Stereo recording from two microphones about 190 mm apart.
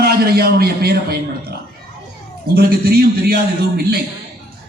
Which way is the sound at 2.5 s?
55° right (ahead or behind).